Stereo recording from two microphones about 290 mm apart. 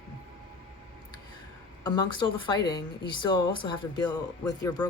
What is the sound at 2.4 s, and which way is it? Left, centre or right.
Speech, centre.